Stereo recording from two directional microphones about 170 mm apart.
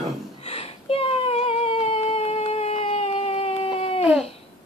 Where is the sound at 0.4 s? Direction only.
35° left (ahead or behind).